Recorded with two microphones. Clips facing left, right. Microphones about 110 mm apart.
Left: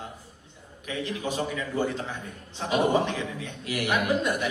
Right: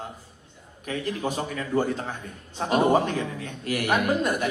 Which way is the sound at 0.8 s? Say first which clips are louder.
Right 3 dB; 45° right (ahead or behind).